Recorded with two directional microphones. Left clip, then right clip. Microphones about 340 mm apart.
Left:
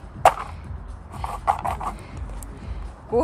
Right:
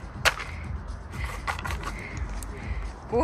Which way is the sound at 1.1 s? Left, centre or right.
Centre.